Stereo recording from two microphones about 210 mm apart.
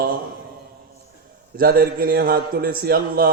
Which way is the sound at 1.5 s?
45° right (ahead or behind).